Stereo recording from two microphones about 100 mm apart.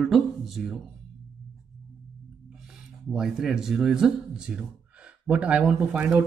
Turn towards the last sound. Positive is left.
turn(degrees=-15)  # may be behind; listen again after turning